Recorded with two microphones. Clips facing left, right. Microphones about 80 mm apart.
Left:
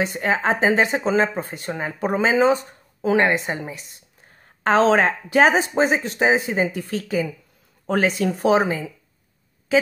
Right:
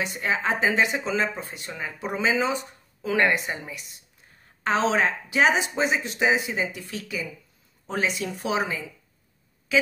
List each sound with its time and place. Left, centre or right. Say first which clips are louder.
0.0 s speech: left 5 dB; left
3.1 s a woman's voice: left 4 dB; left
3.4 s speech: left 5 dB; left
4.6 s speech: left 6 dB; left
7.8 s speech: left 7 dB; left
9.7 s a sound: left 4 dB; left